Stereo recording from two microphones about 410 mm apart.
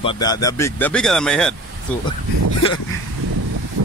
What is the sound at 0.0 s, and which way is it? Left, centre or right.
Speech, centre.